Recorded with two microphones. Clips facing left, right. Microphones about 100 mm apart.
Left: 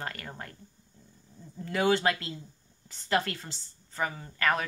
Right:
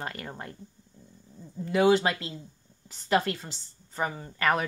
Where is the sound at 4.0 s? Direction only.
25° right (ahead or behind).